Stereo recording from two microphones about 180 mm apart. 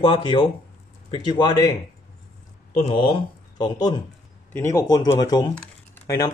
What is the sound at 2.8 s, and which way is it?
Speech, 30° left (ahead or behind).